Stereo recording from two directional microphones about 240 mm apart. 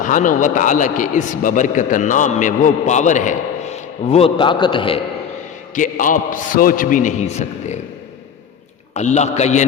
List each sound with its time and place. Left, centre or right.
0.0 s a man's voice: left
5.7 s a man's voice: left
9.0 s a man's voice: left